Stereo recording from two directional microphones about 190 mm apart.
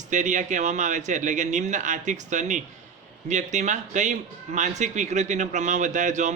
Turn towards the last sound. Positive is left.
turn(degrees=-40)  # may be behind; listen again after turning